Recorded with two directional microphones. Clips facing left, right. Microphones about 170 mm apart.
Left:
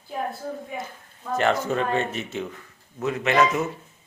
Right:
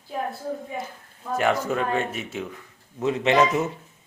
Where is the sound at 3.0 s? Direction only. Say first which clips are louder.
Right 1 dB; 25° right (ahead or behind).